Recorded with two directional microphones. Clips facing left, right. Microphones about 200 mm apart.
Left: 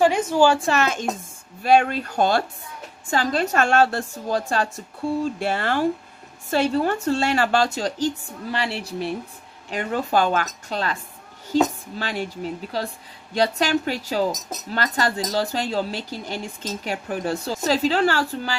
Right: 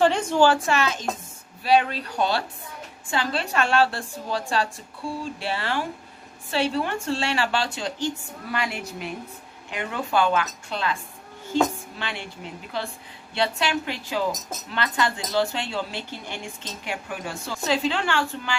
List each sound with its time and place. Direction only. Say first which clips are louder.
0.0 s a woman's voice: left 2 dB; 10° left (ahead or behind)
0.6 s a woman's voice: left 2 dB; 40° left (ahead or behind)
12.0 s speech: left 7 dB; 40° left (ahead or behind)
13.3 s speech: left 4 dB; 40° left (ahead or behind)